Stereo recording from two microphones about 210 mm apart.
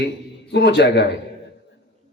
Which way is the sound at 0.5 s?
55° left (ahead or behind).